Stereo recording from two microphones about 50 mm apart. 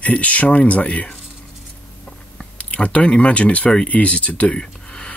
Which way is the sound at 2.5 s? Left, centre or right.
Left.